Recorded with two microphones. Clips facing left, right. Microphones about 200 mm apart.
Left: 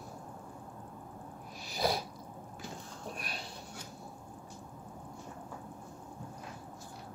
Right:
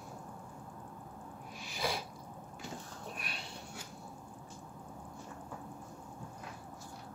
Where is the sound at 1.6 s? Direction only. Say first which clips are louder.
Left 5 dB; 40° left (ahead or behind).